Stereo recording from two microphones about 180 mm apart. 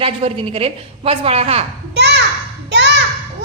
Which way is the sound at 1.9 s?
70° right (ahead or behind).